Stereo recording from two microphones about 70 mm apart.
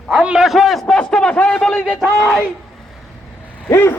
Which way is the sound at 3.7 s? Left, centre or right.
Left.